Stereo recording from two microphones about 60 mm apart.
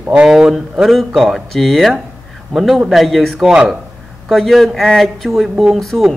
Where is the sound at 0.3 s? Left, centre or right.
Centre.